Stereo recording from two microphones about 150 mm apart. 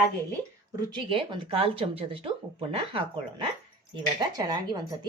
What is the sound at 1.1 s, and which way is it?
Speech, 35° right (ahead or behind).